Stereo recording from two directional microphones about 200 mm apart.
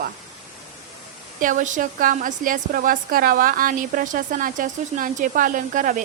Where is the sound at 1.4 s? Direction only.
40° right (ahead or behind).